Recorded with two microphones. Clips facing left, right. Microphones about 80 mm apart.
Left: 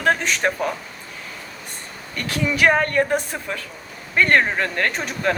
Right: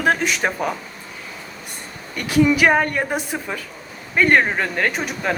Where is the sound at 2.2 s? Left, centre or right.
Centre.